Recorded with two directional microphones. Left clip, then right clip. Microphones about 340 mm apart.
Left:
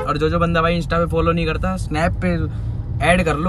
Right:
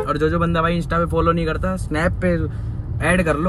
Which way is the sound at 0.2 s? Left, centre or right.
Centre.